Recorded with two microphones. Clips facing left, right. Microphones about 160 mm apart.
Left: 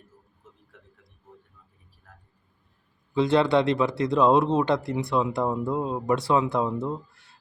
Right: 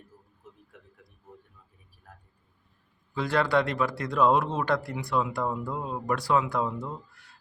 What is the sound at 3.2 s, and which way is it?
Speech, 25° left (ahead or behind).